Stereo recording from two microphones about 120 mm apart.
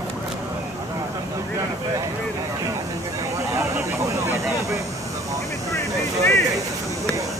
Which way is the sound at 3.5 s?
25° right (ahead or behind).